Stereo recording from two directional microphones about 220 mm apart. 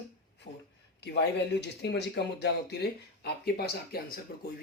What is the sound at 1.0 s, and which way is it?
Speech, 50° left (ahead or behind).